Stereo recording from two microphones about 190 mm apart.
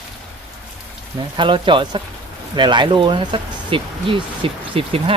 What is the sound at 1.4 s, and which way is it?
Speech, 25° right (ahead or behind).